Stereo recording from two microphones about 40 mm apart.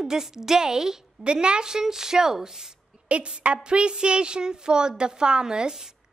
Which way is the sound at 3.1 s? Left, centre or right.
Right.